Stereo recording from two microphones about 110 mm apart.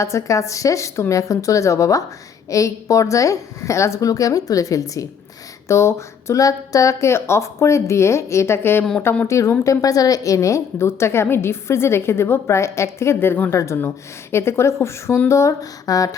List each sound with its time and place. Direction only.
0.0 s a woman's voice: 30° left (ahead or behind)
8.8 s speech: 5° left (ahead or behind)
9.2 s a woman's voice: 25° left (ahead or behind)